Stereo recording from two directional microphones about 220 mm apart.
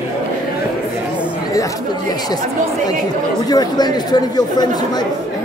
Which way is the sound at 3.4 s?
20° left (ahead or behind).